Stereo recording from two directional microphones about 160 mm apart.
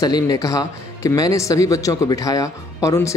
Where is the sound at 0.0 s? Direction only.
25° left (ahead or behind).